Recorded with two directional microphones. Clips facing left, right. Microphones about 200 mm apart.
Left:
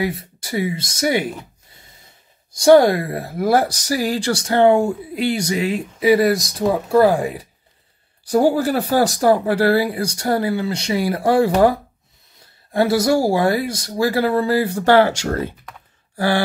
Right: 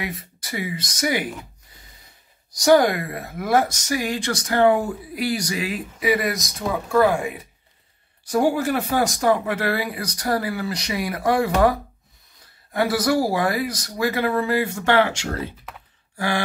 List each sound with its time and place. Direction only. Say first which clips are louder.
0.0 s speech: left 8 dB; 30° left (ahead or behind)
2.5 s speech: left 5 dB; 25° left (ahead or behind)
12.7 s speech: left 4 dB; 25° left (ahead or behind); by 15.5 s 45° left (ahead or behind)
16.2 s speech: left 6 dB; 35° left (ahead or behind)